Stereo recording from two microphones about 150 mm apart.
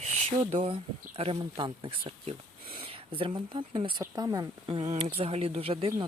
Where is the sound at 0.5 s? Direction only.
40° right (ahead or behind).